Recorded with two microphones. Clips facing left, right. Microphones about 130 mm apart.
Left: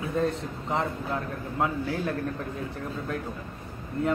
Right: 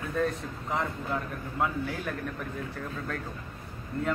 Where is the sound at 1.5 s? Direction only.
25° left (ahead or behind).